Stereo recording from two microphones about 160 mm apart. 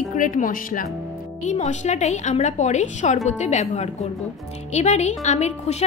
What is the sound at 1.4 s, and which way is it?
A woman's voice, 45° left (ahead or behind).